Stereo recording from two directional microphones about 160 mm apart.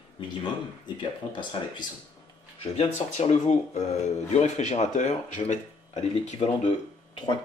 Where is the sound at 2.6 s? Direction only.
40° left (ahead or behind).